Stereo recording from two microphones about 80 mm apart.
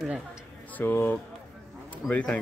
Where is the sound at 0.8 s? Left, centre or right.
Left.